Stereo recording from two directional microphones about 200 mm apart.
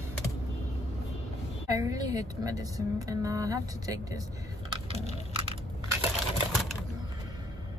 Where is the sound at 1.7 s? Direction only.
15° right (ahead or behind).